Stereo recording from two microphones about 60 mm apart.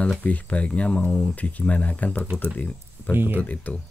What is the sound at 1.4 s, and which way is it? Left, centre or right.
Speech, left.